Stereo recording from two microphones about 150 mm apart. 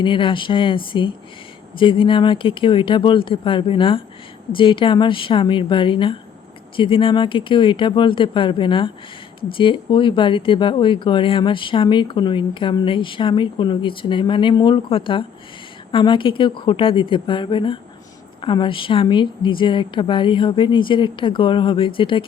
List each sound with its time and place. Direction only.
0.0 s speech: 35° left (ahead or behind)